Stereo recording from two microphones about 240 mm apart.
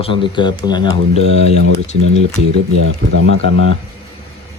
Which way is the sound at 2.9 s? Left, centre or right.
Right.